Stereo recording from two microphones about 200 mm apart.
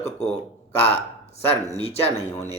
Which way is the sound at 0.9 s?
30° left (ahead or behind).